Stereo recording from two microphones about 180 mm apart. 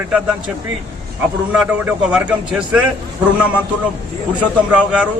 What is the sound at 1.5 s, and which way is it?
A man's voice, 5° right (ahead or behind).